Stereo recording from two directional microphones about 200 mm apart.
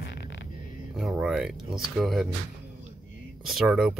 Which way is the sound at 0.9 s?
5° right (ahead or behind).